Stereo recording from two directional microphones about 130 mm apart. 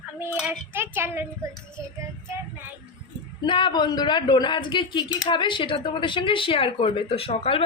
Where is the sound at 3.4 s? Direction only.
40° left (ahead or behind).